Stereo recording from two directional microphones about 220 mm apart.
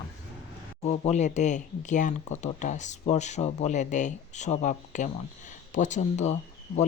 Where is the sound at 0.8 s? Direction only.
30° left (ahead or behind).